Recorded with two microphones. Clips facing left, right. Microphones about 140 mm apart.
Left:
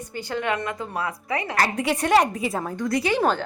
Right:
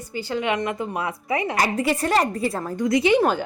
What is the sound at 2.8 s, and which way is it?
Speech, 20° right (ahead or behind).